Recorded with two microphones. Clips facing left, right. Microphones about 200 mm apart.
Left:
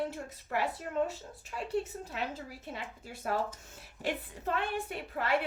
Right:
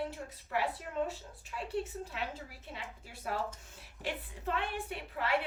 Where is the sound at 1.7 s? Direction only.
40° left (ahead or behind).